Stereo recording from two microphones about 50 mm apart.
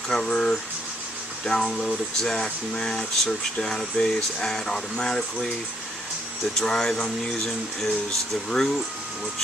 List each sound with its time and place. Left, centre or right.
0.1 s speech: centre
6.6 s speech: centre